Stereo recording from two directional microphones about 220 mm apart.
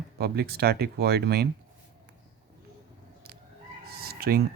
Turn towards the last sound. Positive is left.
turn(degrees=-45)  # may be behind; listen again after turning